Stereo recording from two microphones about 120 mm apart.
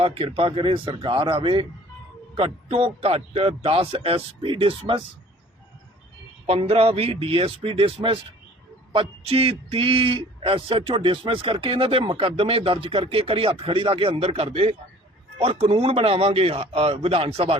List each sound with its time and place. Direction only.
0.0 s speech: 50° right (ahead or behind)
6.4 s a man's voice: 50° right (ahead or behind)